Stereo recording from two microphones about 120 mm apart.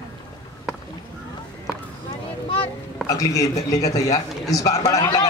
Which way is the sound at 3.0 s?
30° left (ahead or behind).